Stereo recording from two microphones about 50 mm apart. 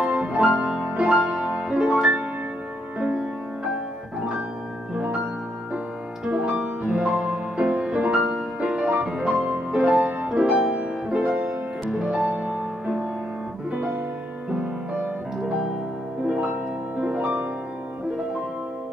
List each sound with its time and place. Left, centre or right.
0.0 s music: right
4.9 s music: right
6.5 s music: centre; by 12.5 s right
15.4 s music: centre